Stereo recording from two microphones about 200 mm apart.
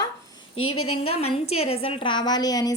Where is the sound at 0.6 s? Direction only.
90° left.